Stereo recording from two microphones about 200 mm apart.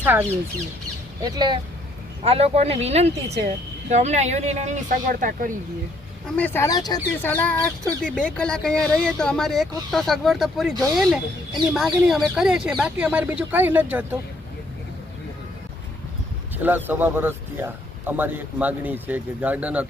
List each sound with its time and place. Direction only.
0.0 s speech: 10° right (ahead or behind)
1.2 s speech: 20° right (ahead or behind); by 5.5 s 40° right (ahead or behind)
6.3 s speech: 10° left (ahead or behind); by 14.2 s 10° right (ahead or behind)
16.6 s a man's voice: 10° right (ahead or behind)